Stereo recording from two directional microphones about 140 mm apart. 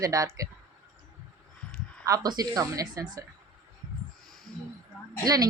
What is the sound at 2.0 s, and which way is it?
Speech, 25° right (ahead or behind).